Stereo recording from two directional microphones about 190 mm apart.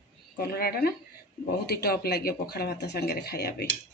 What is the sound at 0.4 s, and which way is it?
Speech, 55° left (ahead or behind).